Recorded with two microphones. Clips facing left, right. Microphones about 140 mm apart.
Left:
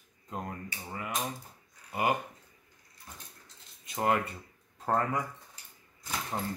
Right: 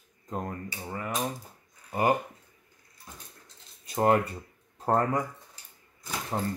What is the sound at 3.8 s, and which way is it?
Speech, 40° right (ahead or behind).